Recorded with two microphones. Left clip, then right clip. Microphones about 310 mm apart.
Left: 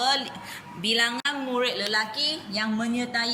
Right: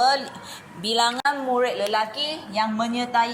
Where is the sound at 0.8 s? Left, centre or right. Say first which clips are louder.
Right 2 dB; right.